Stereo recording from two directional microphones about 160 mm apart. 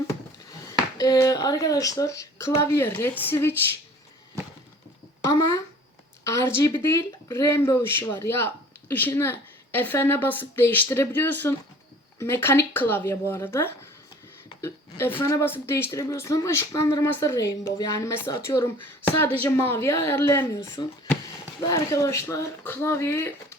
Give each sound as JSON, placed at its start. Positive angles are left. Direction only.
{"t": 0.9, "sound": "speech", "side_deg": 25}
{"t": 6.2, "sound": "speech", "side_deg": 15}